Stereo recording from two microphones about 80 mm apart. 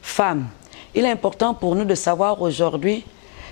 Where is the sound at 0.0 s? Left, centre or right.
Centre.